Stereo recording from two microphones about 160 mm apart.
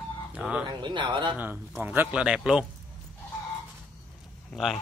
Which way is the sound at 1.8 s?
10° right (ahead or behind).